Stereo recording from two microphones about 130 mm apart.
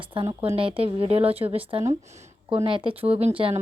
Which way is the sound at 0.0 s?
40° right (ahead or behind).